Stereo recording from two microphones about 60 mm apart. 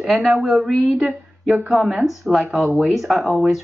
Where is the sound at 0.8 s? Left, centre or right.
Right.